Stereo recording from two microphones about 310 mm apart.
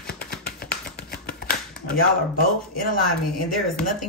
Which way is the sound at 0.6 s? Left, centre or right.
Left.